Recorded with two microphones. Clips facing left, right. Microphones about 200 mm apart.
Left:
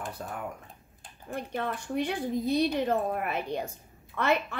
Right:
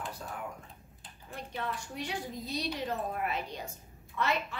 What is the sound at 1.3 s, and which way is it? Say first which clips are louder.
A woman's voice: left 5 dB; 55° left (ahead or behind).